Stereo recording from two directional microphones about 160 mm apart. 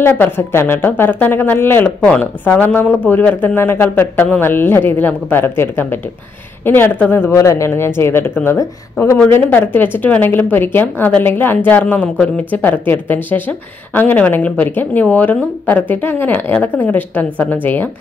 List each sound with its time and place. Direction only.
0.0 s a woman's voice: 15° left (ahead or behind)